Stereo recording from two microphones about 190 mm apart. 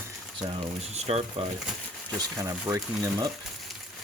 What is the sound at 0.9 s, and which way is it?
Speech, 35° right (ahead or behind).